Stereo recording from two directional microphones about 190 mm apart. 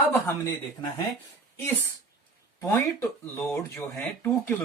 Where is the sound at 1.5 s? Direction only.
10° left (ahead or behind).